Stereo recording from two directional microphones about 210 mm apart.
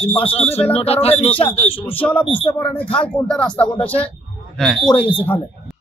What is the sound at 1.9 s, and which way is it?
Speech, 10° left (ahead or behind).